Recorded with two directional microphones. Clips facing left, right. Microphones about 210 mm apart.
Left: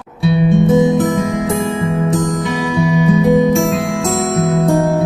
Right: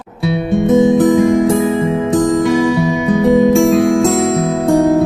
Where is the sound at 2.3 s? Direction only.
Centre (ahead or behind).